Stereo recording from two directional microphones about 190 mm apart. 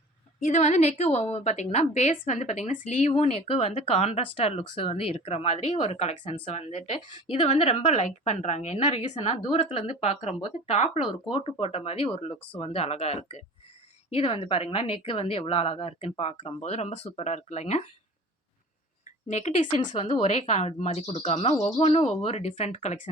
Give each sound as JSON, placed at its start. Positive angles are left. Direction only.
{"t": 0.3, "sound": "speech", "side_deg": 40}
{"t": 19.3, "sound": "speech", "side_deg": 35}